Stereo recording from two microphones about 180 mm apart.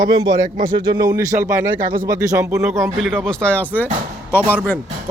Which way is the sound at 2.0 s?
15° right (ahead or behind).